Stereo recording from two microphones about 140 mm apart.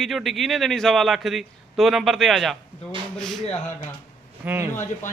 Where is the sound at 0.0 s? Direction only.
Centre (ahead or behind).